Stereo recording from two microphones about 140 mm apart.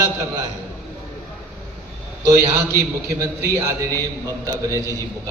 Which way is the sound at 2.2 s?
20° right (ahead or behind).